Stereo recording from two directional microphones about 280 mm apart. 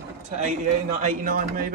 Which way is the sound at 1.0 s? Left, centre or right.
Right.